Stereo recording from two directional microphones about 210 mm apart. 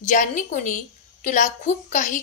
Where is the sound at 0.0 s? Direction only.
35° left (ahead or behind).